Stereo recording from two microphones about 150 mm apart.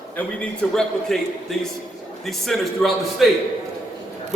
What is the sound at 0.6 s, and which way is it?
A man's voice, 10° left (ahead or behind).